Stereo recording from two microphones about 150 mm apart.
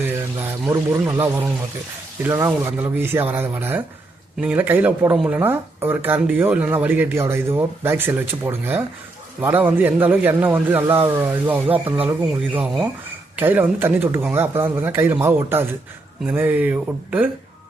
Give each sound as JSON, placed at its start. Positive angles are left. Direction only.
{"t": 0.7, "sound": "a man's voice", "side_deg": -20}